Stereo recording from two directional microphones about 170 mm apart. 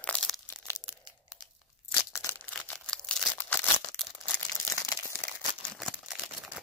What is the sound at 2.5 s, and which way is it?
Crumpling, 5° left (ahead or behind).